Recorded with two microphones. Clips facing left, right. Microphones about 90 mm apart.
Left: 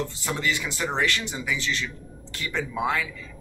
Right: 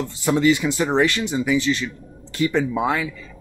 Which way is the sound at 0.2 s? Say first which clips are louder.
Right 14 dB; 20° right (ahead or behind).